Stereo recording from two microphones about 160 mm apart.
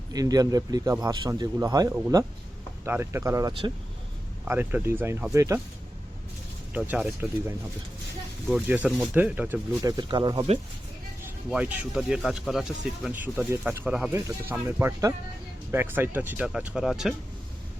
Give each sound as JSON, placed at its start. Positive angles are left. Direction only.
{"t": 0.1, "sound": "speech", "side_deg": -25}
{"t": 1.3, "sound": "speech", "side_deg": -20}
{"t": 6.7, "sound": "speech", "side_deg": -10}
{"t": 8.6, "sound": "speech", "side_deg": -10}
{"t": 10.0, "sound": "speech", "side_deg": -30}
{"t": 11.4, "sound": "speech", "side_deg": -5}
{"t": 14.1, "sound": "speech", "side_deg": -20}